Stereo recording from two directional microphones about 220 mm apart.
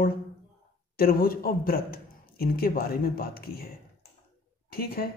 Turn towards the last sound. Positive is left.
turn(degrees=45)  # may be behind; listen again after turning